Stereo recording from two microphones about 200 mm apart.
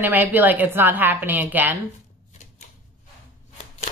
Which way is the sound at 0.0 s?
10° right (ahead or behind).